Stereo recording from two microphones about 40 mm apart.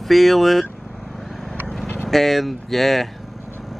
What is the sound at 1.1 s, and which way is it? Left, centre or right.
Vehicle, centre.